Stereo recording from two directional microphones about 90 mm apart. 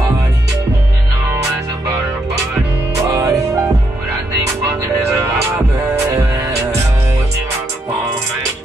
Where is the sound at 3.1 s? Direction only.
40° right (ahead or behind).